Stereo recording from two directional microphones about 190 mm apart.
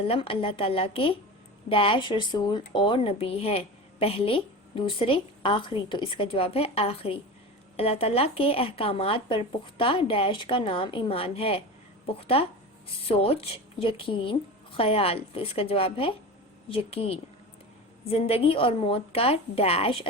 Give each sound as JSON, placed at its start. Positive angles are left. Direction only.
{"t": 0.0, "sound": "a woman's voice", "side_deg": 30}